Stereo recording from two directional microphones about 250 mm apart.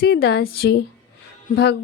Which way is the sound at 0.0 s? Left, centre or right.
Left.